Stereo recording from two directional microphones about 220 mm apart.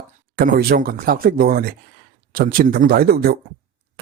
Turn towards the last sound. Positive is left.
turn(degrees=-45)  # may be behind; listen again after turning